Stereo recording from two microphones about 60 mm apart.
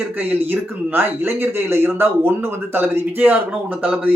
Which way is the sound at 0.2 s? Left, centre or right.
Right.